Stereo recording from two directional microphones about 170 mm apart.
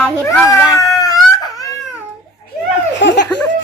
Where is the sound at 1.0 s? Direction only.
20° left (ahead or behind).